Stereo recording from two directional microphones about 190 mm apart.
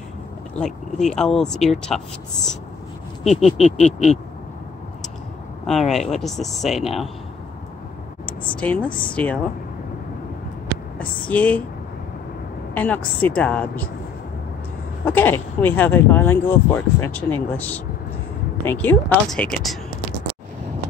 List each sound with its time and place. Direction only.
0.6 s speech: 5° left (ahead or behind)
3.3 s vehicle: 35° left (ahead or behind)
5.7 s speech: centre (ahead or behind)
8.3 s a woman's voice: 5° left (ahead or behind)
11.2 s speech: 10° left (ahead or behind)
12.7 s speech: 10° left (ahead or behind)
15.0 s speech: 10° left (ahead or behind)